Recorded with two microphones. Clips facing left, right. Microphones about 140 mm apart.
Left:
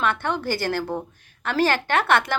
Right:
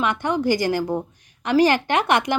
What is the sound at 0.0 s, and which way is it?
Speech, 15° right (ahead or behind).